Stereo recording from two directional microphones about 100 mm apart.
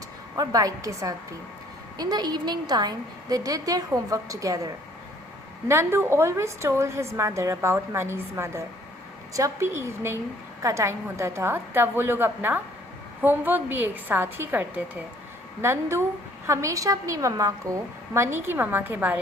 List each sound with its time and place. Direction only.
0.3 s a woman's voice: 35° right (ahead or behind); by 19.2 s 15° right (ahead or behind)